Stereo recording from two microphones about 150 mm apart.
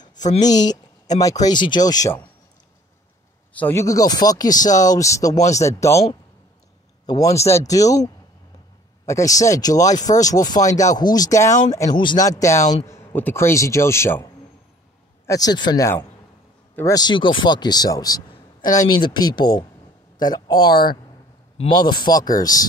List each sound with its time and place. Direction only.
0.0 s a sound: 25° left (ahead or behind)
0.4 s speech: 25° left (ahead or behind)
3.5 s speech: 15° left (ahead or behind)
7.1 s speech: 25° left (ahead or behind)
20.7 s speech: 85° left
21.7 s speech: 30° left (ahead or behind)